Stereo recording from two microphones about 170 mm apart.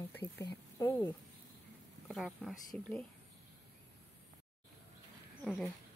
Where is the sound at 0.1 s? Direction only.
15° left (ahead or behind).